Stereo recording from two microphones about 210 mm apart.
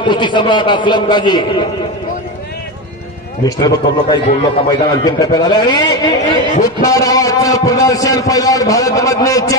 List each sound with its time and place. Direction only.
0.0 s a man's voice: 20° left (ahead or behind)
3.4 s a man's voice: 20° left (ahead or behind)